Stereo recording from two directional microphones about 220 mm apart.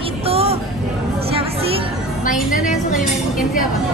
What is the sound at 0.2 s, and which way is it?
Music, 25° right (ahead or behind).